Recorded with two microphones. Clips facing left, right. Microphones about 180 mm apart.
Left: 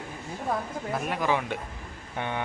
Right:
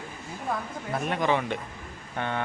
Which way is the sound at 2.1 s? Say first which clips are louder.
Right 1 dB; 15° left (ahead or behind).